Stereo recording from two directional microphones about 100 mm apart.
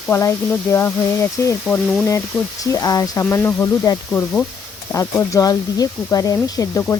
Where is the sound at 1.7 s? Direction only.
Centre (ahead or behind).